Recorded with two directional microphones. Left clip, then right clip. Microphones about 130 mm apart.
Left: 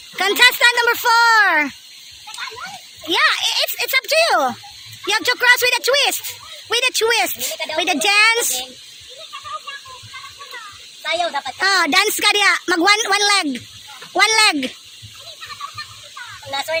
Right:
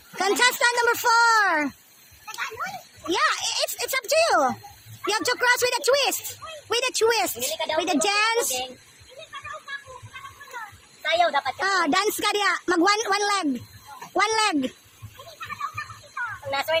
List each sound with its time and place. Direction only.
0.2 s speech: 10° left (ahead or behind)
3.1 s speech: 10° left (ahead or behind)
11.0 s speech: 45° left (ahead or behind)
11.6 s speech: 10° left (ahead or behind)
16.5 s speech: 55° left (ahead or behind)